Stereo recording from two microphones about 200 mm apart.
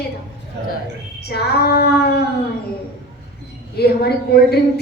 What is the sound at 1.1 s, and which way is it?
A woman's voice, 55° left (ahead or behind).